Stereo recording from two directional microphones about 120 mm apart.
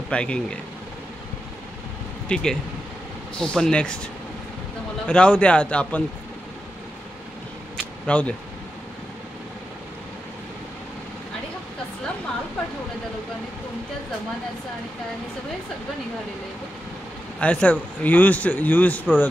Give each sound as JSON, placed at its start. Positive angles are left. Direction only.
{"t": 0.1, "sound": "a man's voice", "side_deg": 10}
{"t": 2.2, "sound": "a man's voice", "side_deg": 5}
{"t": 5.0, "sound": "a man's voice", "side_deg": 10}
{"t": 8.1, "sound": "a man's voice", "side_deg": 10}
{"t": 17.4, "sound": "a man's voice", "side_deg": 10}